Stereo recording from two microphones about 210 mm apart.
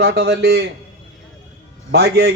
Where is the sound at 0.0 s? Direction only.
50° right (ahead or behind).